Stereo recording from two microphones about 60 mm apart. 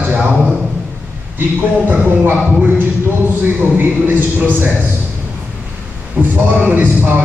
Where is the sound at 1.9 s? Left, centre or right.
Right.